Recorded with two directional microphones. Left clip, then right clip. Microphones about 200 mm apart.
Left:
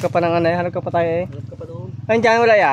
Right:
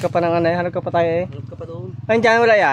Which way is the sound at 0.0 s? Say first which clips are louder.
Even; 10° left (ahead or behind).